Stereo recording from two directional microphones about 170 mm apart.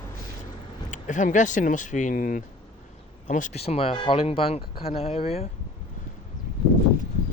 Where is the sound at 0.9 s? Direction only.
45° left (ahead or behind).